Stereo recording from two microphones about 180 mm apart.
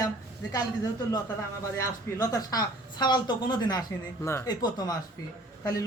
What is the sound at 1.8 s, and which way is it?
A woman's voice, 20° left (ahead or behind).